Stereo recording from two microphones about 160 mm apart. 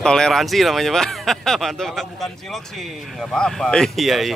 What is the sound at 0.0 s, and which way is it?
Speech, 5° left (ahead or behind).